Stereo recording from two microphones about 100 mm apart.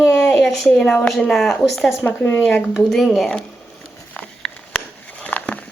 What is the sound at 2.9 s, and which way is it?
Speech, 5° left (ahead or behind).